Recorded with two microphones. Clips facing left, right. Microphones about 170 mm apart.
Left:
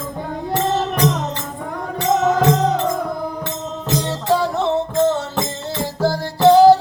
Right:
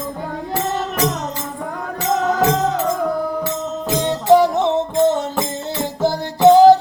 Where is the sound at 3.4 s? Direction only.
10° right (ahead or behind).